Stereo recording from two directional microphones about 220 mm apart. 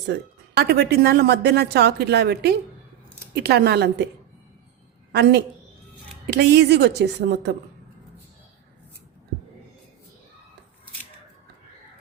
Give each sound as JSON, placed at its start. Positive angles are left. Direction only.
{"t": 0.1, "sound": "speech", "side_deg": -50}
{"t": 5.1, "sound": "speech", "side_deg": -50}